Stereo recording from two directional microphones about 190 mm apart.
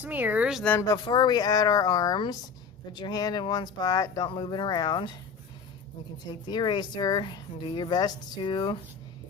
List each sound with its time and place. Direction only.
0.0 s speech: 10° right (ahead or behind)
0.6 s speech: 5° left (ahead or behind)
0.9 s speech: 25° left (ahead or behind)
6.5 s speech: 25° left (ahead or behind)